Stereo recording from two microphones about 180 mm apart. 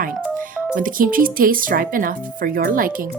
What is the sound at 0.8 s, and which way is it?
Speech, 50° right (ahead or behind).